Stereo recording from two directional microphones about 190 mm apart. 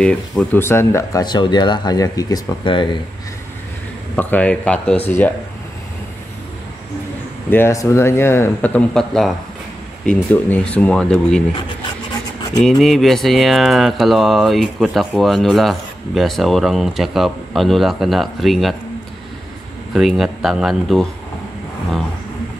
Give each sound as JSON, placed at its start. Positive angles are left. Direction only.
{"t": 0.0, "sound": "speech", "side_deg": 5}
{"t": 4.1, "sound": "speech", "side_deg": 10}
{"t": 7.4, "sound": "speech", "side_deg": 10}
{"t": 12.6, "sound": "speech", "side_deg": 0}
{"t": 19.9, "sound": "speech", "side_deg": 0}